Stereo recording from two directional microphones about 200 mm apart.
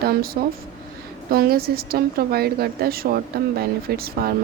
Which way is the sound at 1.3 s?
50° right (ahead or behind).